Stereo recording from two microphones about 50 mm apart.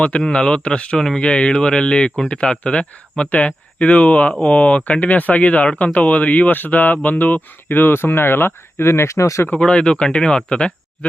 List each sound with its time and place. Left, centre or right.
0.2 s speech: centre; by 9.4 s left
9.6 s speech: centre